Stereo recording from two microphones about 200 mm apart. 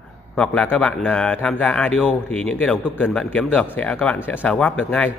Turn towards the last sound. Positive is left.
turn(degrees=10)  # may be behind; listen again after turning